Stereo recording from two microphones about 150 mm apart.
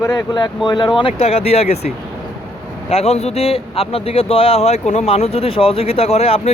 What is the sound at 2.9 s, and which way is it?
Speech, 45° left (ahead or behind).